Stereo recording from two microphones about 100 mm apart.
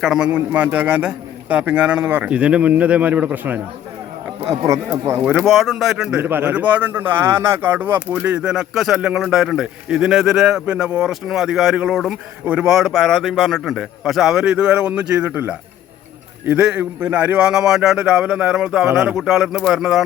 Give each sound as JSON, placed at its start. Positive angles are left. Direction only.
{"t": 0.0, "sound": "a man's voice", "side_deg": -5}
{"t": 0.3, "sound": "a man's voice", "side_deg": -15}
{"t": 4.4, "sound": "speech", "side_deg": -30}
{"t": 5.2, "sound": "a man's voice", "side_deg": -10}
{"t": 6.1, "sound": "a man's voice", "side_deg": -20}
{"t": 12.7, "sound": "a man's voice", "side_deg": 0}
{"t": 18.9, "sound": "speech", "side_deg": -25}
{"t": 19.1, "sound": "a man's voice", "side_deg": -5}